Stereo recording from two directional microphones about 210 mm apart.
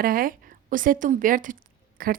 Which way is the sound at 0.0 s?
45° right (ahead or behind).